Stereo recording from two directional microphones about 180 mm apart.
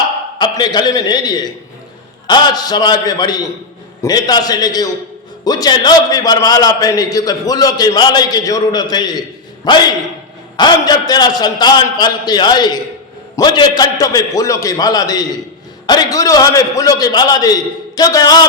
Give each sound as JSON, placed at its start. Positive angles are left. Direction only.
{"t": 0.3, "sound": "a man's voice", "side_deg": 25}